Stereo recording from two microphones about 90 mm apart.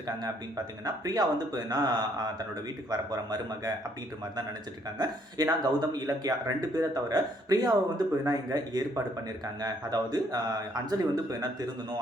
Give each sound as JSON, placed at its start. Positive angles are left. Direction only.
{"t": 0.2, "sound": "speech", "side_deg": -45}
{"t": 4.9, "sound": "speech", "side_deg": -50}